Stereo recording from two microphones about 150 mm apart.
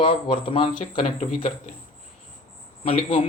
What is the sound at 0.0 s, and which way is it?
Speech, 40° left (ahead or behind).